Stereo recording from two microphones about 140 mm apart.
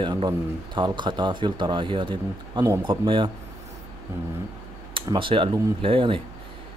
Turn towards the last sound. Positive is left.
turn(degrees=-40)  # may be behind; listen again after turning